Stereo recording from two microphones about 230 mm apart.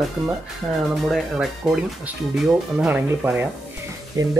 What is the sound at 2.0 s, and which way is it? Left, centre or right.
Speech, centre.